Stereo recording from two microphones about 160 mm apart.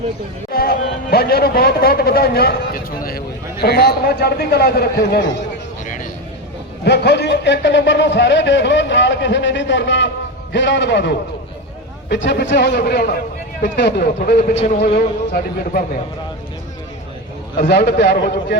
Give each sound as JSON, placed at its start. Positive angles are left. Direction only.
{"t": 0.5, "sound": "a man's voice", "side_deg": 70}
{"t": 6.8, "sound": "a man's voice", "side_deg": 90}
{"t": 17.7, "sound": "a man's voice", "side_deg": 90}